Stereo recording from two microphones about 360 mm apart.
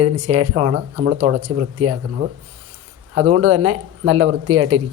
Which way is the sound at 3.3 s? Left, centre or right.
Right.